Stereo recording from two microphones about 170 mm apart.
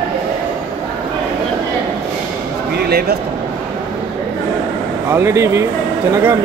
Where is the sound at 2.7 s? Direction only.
70° right (ahead or behind).